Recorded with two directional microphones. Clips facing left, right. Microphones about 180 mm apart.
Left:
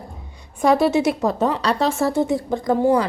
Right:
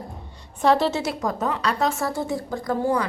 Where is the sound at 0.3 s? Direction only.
10° left (ahead or behind).